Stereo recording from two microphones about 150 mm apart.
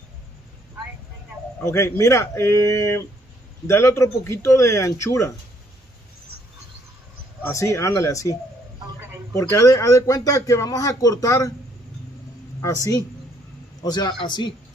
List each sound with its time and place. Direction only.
1.6 s speech: 15° left (ahead or behind)
7.4 s speech: 20° left (ahead or behind)
12.6 s speech: 20° left (ahead or behind)